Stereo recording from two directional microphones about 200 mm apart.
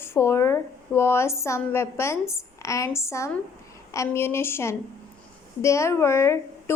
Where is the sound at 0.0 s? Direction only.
10° left (ahead or behind).